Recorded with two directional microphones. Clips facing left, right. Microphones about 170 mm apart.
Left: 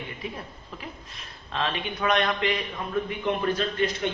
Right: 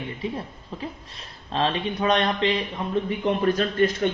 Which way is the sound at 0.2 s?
30° right (ahead or behind).